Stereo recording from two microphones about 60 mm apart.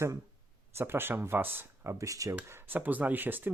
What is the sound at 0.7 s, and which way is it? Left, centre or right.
Speech, right.